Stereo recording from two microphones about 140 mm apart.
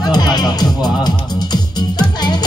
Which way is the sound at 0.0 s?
30° left (ahead or behind).